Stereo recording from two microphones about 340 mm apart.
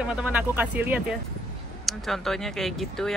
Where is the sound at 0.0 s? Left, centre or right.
Centre.